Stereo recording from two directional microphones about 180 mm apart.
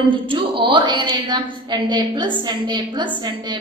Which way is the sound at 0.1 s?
30° right (ahead or behind).